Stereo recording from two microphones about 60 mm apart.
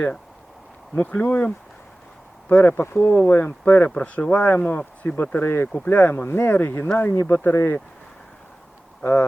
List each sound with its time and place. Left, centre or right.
0.9 s speech: left